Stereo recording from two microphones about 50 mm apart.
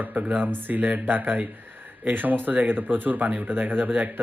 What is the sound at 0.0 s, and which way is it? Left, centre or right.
Speech, right.